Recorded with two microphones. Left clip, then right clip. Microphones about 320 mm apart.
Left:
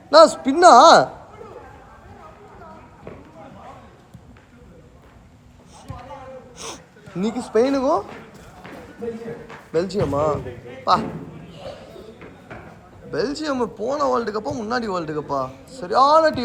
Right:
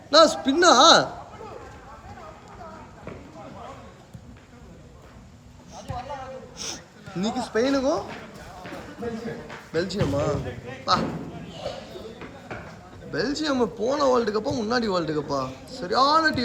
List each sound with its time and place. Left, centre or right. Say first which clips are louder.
0.1 s a man's voice: left 5 dB; centre
6.6 s a sound: even; centre
9.7 s speech: left 5 dB; centre
13.1 s speech: left 2 dB; centre